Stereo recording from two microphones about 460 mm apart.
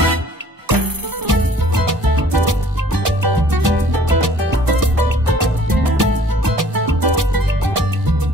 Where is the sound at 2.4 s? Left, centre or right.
Right.